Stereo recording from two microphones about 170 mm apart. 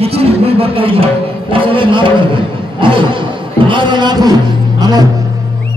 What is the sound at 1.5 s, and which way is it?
A man's voice, 30° right (ahead or behind).